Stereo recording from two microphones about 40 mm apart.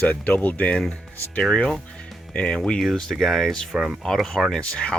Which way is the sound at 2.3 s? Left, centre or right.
Left.